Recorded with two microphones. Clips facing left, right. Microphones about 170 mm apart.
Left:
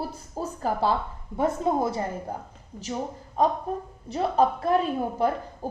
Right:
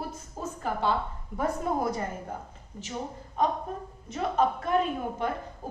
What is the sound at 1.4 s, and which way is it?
Speech, 25° left (ahead or behind).